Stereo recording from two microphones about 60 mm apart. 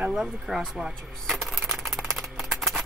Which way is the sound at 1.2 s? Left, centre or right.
Centre.